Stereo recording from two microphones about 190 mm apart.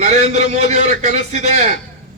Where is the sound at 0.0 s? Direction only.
35° right (ahead or behind).